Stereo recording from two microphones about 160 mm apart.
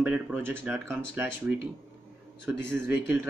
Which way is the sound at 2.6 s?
15° right (ahead or behind).